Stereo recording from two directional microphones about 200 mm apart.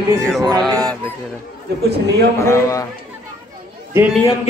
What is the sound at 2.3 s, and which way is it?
Speech, 15° left (ahead or behind).